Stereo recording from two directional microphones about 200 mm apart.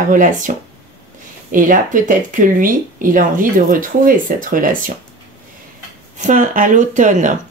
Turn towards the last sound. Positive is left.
turn(degrees=-40)  # may be behind; listen again after turning